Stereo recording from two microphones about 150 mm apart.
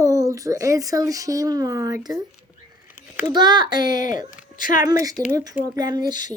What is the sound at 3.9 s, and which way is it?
Speech, 60° left (ahead or behind).